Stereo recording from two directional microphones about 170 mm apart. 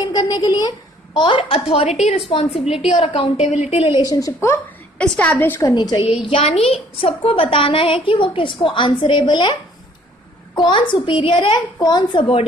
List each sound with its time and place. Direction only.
0.0 s a woman's voice: 25° left (ahead or behind)
5.6 s a woman's voice: 25° left (ahead or behind)